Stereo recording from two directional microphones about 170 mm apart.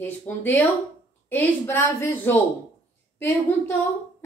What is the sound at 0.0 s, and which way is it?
Speech, 10° left (ahead or behind).